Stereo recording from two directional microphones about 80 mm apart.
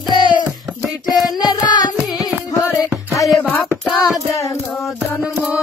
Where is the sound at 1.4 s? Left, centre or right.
Left.